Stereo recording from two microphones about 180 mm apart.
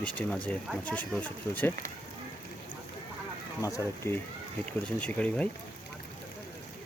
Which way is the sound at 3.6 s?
15° left (ahead or behind).